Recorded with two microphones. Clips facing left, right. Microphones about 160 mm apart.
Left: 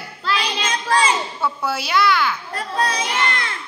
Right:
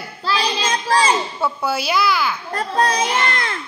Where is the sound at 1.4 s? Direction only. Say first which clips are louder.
Right 2 dB; centre (ahead or behind).